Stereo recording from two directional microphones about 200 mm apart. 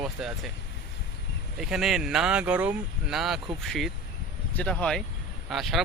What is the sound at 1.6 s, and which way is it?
Speech, centre (ahead or behind).